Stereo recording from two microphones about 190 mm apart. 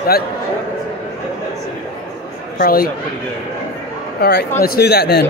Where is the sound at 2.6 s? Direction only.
50° left (ahead or behind).